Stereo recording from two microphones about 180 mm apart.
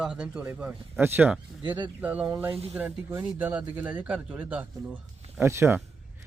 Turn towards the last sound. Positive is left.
turn(degrees=-15)  # may be behind; listen again after turning